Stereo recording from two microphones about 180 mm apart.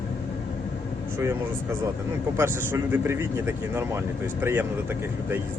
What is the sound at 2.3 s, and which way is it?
Speech, 15° right (ahead or behind).